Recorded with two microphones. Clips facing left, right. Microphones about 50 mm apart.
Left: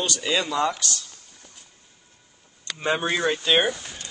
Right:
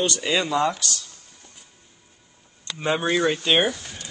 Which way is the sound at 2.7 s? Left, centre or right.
Centre.